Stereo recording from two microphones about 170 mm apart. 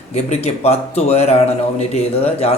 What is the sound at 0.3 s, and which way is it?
A man's voice, 35° left (ahead or behind).